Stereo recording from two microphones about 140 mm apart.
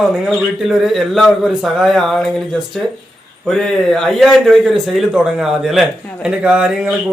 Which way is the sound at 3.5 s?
Centre (ahead or behind).